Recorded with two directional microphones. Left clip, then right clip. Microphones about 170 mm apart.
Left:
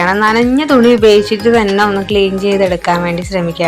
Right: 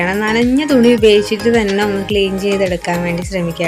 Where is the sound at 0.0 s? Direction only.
20° right (ahead or behind).